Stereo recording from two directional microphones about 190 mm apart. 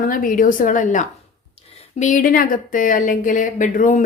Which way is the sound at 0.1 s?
45° left (ahead or behind).